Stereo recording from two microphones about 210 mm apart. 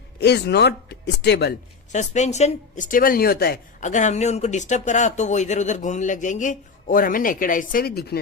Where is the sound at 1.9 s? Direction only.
35° left (ahead or behind).